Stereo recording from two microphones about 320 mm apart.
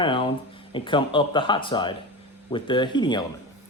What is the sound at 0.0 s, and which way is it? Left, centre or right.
Speech, centre.